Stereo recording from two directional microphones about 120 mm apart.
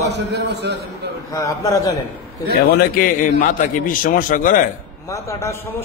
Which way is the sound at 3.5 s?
90° left.